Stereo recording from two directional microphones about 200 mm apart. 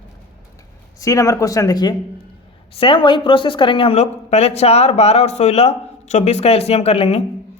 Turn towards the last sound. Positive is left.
turn(degrees=30)  # may be behind; listen again after turning